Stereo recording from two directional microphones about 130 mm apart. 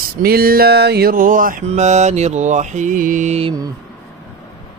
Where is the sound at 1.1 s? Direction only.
90° right.